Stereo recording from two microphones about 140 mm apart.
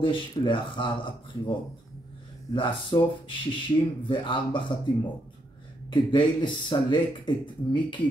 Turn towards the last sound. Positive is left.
turn(degrees=35)  # may be behind; listen again after turning